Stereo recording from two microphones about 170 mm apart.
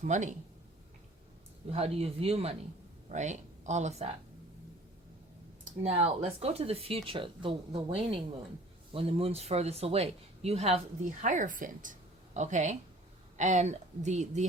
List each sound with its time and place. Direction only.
0.0 s speech: 45° right (ahead or behind)
1.7 s speech: 35° right (ahead or behind)
5.8 s speech: 40° right (ahead or behind)